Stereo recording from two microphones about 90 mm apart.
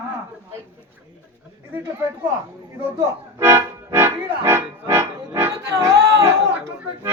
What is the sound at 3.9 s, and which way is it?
Music, 30° right (ahead or behind).